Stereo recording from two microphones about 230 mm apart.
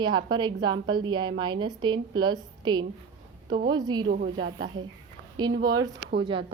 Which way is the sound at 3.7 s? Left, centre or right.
Centre.